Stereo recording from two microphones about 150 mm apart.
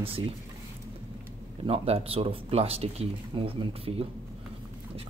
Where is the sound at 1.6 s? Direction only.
40° right (ahead or behind).